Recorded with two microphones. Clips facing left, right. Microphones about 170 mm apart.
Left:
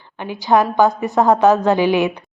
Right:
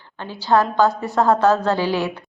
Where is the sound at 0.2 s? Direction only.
15° left (ahead or behind).